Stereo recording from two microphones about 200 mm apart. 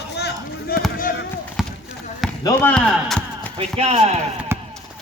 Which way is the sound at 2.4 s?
10° left (ahead or behind).